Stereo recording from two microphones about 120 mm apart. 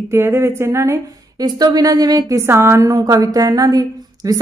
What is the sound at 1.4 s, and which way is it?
A woman's voice, 35° right (ahead or behind).